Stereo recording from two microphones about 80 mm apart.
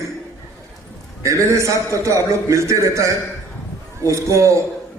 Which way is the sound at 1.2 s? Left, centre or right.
Right.